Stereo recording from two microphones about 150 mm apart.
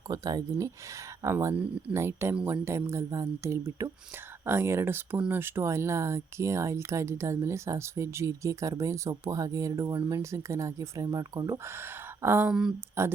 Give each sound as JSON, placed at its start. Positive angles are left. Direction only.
{"t": 0.1, "sound": "speech", "side_deg": -25}
{"t": 13.0, "sound": "speech", "side_deg": -15}